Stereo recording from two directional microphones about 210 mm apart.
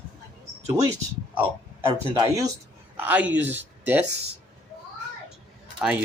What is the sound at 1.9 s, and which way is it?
Speech, 15° right (ahead or behind).